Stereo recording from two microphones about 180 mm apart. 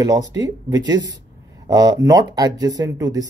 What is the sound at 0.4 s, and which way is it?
Speech, 20° right (ahead or behind).